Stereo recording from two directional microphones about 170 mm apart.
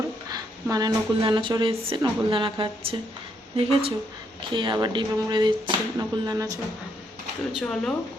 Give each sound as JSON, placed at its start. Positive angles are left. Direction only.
{"t": 0.3, "sound": "speech", "side_deg": -20}
{"t": 7.5, "sound": "speech", "side_deg": 5}